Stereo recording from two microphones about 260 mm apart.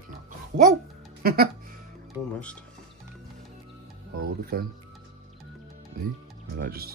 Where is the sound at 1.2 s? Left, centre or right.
Right.